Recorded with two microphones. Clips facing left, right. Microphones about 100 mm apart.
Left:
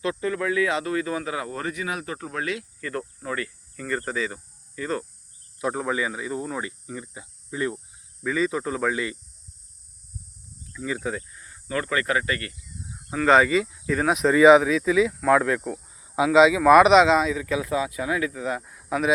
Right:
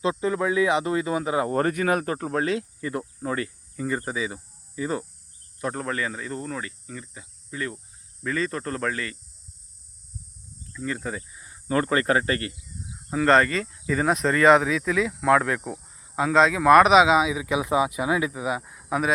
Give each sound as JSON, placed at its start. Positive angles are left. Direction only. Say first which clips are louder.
{"t": 0.0, "sound": "speech", "louder": "right 2 dB", "side_deg": -20}
{"t": 1.5, "sound": "speech", "louder": "right 7 dB", "side_deg": -50}
{"t": 2.8, "sound": "cricket", "louder": "right 1 dB", "side_deg": -20}
{"t": 3.2, "sound": "speech", "louder": "right 3 dB", "side_deg": -25}
{"t": 3.8, "sound": "speech", "louder": "even", "side_deg": -15}
{"t": 5.5, "sound": "speech", "louder": "left 3 dB", "side_deg": 5}
{"t": 8.2, "sound": "speech", "louder": "left 3 dB", "side_deg": 5}
{"t": 10.8, "sound": "speech", "louder": "left 2 dB", "side_deg": 5}
{"t": 11.3, "sound": "snake", "louder": "even", "side_deg": -15}
{"t": 11.7, "sound": "speech", "louder": "right 3 dB", "side_deg": -35}
{"t": 13.1, "sound": "speech", "louder": "left 1 dB", "side_deg": 0}
{"t": 15.9, "sound": "speech", "louder": "left 3 dB", "side_deg": 10}